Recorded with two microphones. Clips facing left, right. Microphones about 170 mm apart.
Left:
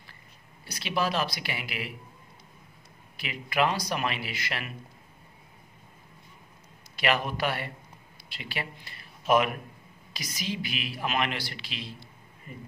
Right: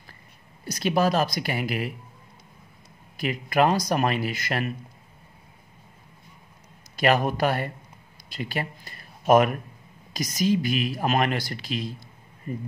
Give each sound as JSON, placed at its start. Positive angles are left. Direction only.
{"t": 0.7, "sound": "speech", "side_deg": -45}
{"t": 3.2, "sound": "speech", "side_deg": -45}
{"t": 7.0, "sound": "speech", "side_deg": -45}